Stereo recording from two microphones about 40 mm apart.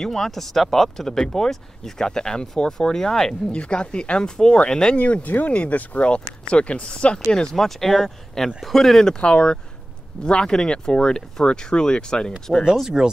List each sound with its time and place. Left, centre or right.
0.0 s speech: centre
3.5 s speech: left
4.9 s speech: left; by 9.1 s centre
9.1 s speech: left
12.9 s speech: centre